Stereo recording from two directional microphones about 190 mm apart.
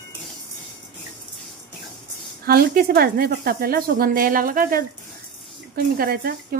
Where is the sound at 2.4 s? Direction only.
50° right (ahead or behind).